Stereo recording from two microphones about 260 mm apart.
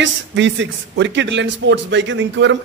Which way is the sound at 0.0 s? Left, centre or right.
Right.